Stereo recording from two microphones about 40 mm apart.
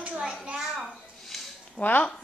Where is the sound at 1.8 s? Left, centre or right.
Left.